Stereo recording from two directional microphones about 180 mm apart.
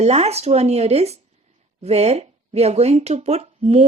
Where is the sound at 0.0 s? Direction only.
35° right (ahead or behind).